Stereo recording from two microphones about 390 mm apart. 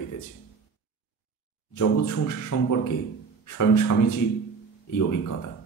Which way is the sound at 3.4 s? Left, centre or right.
Left.